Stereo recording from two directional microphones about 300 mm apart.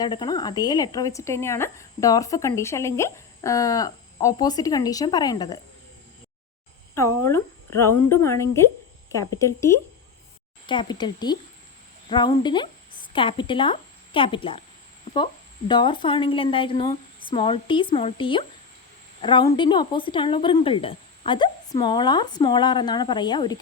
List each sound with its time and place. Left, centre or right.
0.0 s speech: centre
7.3 s a woman's voice: centre